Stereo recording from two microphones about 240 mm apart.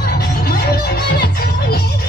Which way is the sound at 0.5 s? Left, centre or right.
Left.